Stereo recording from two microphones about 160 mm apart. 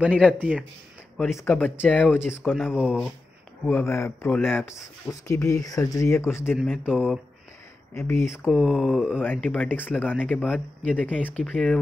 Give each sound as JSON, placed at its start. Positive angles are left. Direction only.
{"t": 0.4, "sound": "speech", "side_deg": -10}
{"t": 1.2, "sound": "speech", "side_deg": 15}
{"t": 2.7, "sound": "speech", "side_deg": -5}
{"t": 3.6, "sound": "speech", "side_deg": 15}
{"t": 6.5, "sound": "speech", "side_deg": 0}
{"t": 7.9, "sound": "speech", "side_deg": 15}
{"t": 8.5, "sound": "speech", "side_deg": 0}
{"t": 9.2, "sound": "speech", "side_deg": 10}